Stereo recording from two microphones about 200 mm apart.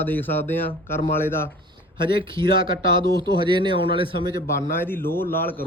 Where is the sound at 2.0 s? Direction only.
25° right (ahead or behind).